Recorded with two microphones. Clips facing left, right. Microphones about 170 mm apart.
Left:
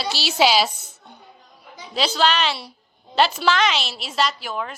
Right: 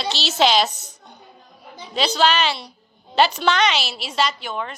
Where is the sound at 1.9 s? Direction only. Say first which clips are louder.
Right 1 dB; centre (ahead or behind).